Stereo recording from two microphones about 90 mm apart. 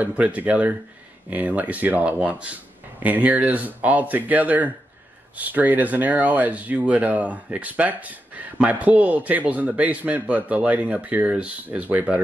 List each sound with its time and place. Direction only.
0.0 s speech: 15° right (ahead or behind)